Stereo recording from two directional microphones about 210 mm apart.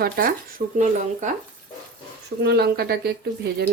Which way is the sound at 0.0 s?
45° right (ahead or behind).